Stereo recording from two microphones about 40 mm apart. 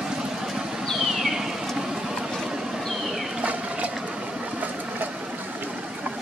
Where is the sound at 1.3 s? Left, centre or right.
Centre.